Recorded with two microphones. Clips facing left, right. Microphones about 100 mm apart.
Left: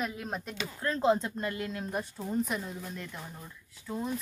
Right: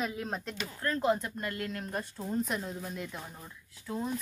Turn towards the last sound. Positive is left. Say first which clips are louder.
# even
turn(degrees=-5)  # may be behind; listen again after turning